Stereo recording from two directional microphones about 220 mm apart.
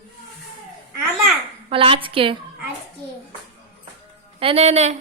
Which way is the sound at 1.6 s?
25° right (ahead or behind).